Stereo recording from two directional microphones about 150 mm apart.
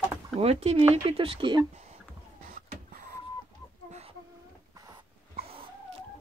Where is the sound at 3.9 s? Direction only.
45° right (ahead or behind).